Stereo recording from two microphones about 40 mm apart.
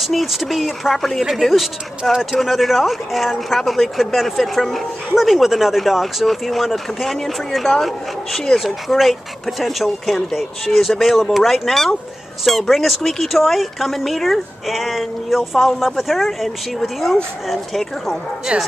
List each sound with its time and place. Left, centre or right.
0.0 s speech: centre
8.6 s speech: centre